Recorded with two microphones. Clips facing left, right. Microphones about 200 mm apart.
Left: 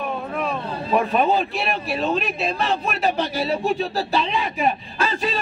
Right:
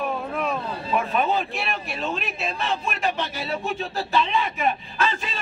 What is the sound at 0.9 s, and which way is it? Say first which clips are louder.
Speech: left 4 dB; 35° left (ahead or behind).